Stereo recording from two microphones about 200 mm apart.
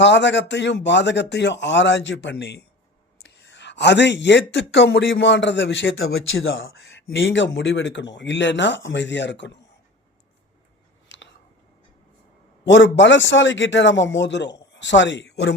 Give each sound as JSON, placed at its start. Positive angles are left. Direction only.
{"t": 0.0, "sound": "speech", "side_deg": 60}
{"t": 6.6, "sound": "speech", "side_deg": 70}
{"t": 11.1, "sound": "a sound", "side_deg": 65}
{"t": 12.6, "sound": "speech", "side_deg": 65}